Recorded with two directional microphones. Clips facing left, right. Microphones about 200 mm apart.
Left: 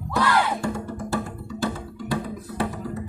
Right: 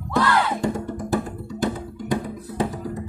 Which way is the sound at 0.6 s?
15° right (ahead or behind).